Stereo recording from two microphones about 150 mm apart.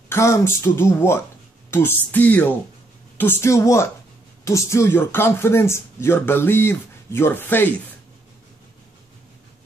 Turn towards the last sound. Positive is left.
turn(degrees=15)  # may be behind; listen again after turning